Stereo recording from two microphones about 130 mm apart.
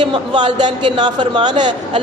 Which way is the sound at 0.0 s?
40° right (ahead or behind).